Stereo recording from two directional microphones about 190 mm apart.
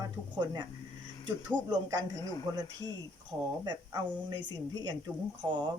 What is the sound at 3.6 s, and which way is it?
Speech, 25° right (ahead or behind).